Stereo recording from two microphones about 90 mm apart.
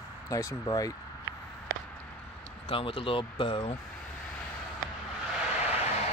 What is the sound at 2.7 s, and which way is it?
Speech, 80° left.